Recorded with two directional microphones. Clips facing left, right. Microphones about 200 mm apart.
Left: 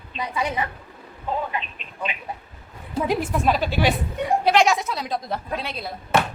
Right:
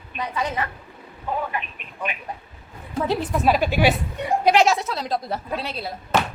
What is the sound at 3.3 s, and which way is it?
A woman's voice, 5° right (ahead or behind).